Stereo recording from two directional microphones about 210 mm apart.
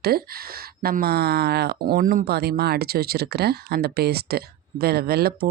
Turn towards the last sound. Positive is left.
turn(degrees=-45)  # may be behind; listen again after turning